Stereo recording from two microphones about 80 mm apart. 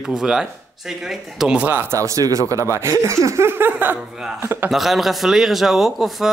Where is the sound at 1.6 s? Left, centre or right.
Right.